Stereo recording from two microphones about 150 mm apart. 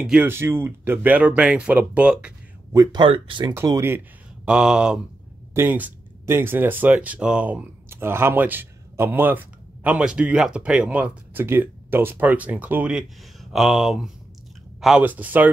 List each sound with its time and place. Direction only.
0.0 s speech: 10° right (ahead or behind)
2.7 s speech: 25° right (ahead or behind)
3.5 s speech: 20° right (ahead or behind)
4.5 s a sound: 5° right (ahead or behind)
5.5 s speech: 15° right (ahead or behind)